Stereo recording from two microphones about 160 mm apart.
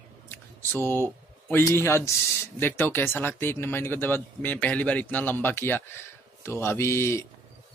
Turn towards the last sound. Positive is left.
turn(degrees=15)  # may be behind; listen again after turning